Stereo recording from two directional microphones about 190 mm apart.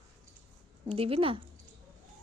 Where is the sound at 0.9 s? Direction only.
30° right (ahead or behind).